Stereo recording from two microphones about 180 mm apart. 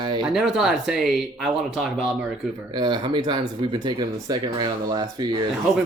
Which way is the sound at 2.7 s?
25° right (ahead or behind).